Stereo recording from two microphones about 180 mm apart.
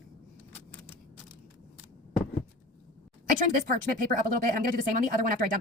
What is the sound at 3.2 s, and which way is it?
Speech, 50° right (ahead or behind).